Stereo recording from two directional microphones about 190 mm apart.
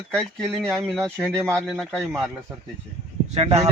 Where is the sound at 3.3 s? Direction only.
35° right (ahead or behind).